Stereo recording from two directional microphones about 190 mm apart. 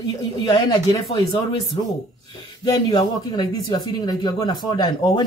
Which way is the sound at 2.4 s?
25° left (ahead or behind).